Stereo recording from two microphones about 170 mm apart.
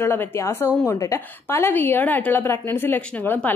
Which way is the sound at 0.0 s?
15° left (ahead or behind).